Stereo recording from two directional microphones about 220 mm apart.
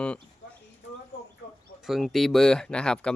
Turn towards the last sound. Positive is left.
turn(degrees=5)  # may be behind; listen again after turning